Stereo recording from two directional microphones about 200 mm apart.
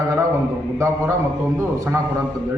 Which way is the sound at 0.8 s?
15° right (ahead or behind).